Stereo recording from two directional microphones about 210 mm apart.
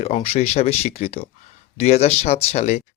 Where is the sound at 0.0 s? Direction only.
30° left (ahead or behind).